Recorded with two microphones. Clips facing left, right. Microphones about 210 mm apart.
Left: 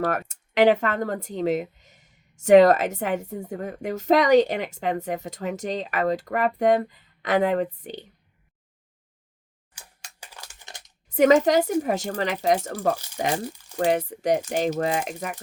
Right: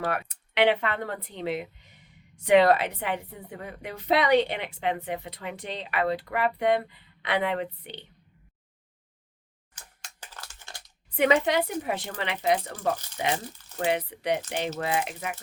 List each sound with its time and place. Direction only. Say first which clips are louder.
0.0 s speech: left 4 dB; 45° left (ahead or behind)
9.7 s a sound: left 1 dB; 10° left (ahead or behind)
11.1 s speech: left 6 dB; 45° left (ahead or behind)